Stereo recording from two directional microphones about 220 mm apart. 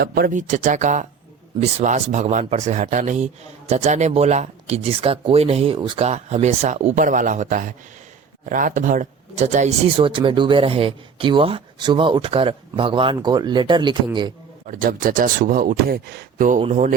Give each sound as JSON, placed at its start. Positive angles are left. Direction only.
{"t": 0.0, "sound": "speech", "side_deg": -45}
{"t": 14.7, "sound": "speech", "side_deg": -40}